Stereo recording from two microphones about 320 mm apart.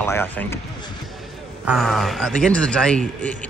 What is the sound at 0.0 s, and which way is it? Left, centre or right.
Speech, centre.